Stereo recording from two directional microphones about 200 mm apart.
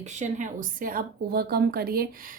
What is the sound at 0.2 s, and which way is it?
A woman's voice, 40° right (ahead or behind).